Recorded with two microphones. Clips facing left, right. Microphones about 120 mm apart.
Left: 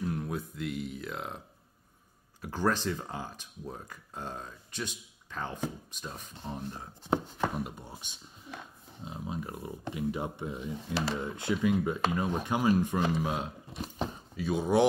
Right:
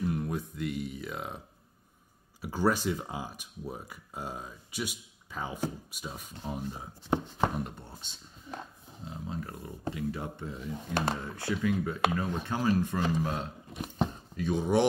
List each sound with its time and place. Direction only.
0.0 s speech: centre (ahead or behind)
2.4 s speech: 10° right (ahead or behind)
7.5 s speech: 10° left (ahead or behind)